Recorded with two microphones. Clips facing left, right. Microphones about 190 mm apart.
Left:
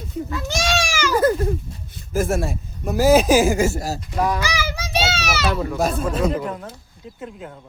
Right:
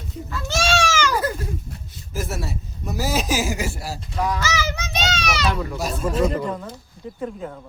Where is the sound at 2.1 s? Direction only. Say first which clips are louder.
Left 8 dB; 50° left (ahead or behind).